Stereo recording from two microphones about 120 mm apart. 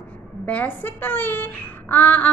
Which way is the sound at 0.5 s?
15° left (ahead or behind).